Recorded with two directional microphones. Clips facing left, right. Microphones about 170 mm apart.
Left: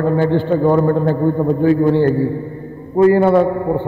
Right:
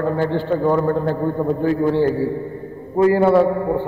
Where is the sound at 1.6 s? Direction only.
5° right (ahead or behind).